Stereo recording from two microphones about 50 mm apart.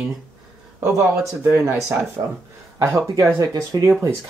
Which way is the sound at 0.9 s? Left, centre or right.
Right.